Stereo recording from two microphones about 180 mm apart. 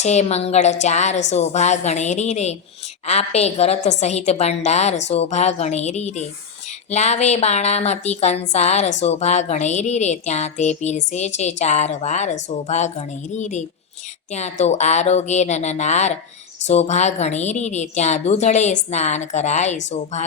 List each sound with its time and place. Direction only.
0.0 s speech: 40° left (ahead or behind)